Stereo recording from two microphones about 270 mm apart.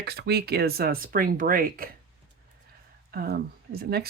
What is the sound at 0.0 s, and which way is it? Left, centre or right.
Speech, right.